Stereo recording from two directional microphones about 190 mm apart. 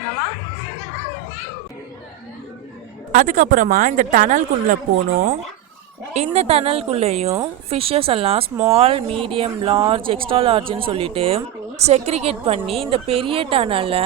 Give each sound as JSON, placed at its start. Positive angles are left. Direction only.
{"t": 3.1, "sound": "speech", "side_deg": -40}
{"t": 6.1, "sound": "a woman's voice", "side_deg": -35}